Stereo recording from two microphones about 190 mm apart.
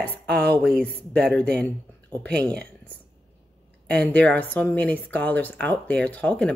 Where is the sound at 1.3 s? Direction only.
5° left (ahead or behind).